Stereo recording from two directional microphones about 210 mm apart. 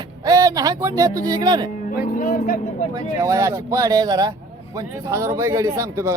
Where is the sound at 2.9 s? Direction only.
15° right (ahead or behind).